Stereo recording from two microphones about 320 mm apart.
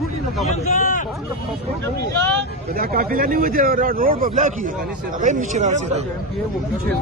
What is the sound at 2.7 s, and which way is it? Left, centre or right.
A man's voice, right.